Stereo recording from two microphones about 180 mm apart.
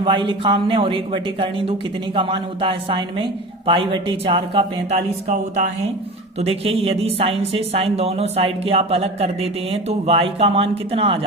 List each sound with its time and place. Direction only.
0.0 s speech: 30° right (ahead or behind)
5.3 s a woman's voice: 40° right (ahead or behind)